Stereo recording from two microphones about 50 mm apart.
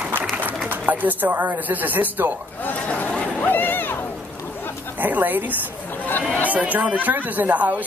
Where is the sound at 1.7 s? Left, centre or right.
Right.